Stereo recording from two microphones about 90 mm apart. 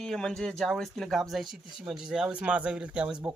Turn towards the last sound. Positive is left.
turn(degrees=-10)  # may be behind; listen again after turning